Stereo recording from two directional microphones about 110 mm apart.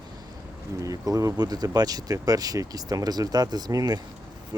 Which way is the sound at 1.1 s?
30° right (ahead or behind).